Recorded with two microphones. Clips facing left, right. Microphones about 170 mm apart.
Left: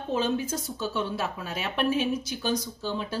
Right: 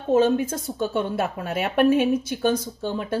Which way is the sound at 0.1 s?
50° right (ahead or behind).